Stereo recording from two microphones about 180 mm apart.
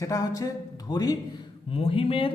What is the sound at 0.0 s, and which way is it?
Speech, 20° left (ahead or behind).